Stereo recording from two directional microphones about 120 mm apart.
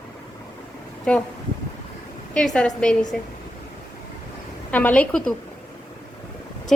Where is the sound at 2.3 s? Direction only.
5° left (ahead or behind).